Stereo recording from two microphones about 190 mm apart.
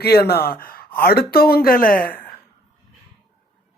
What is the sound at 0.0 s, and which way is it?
Speech, 55° left (ahead or behind).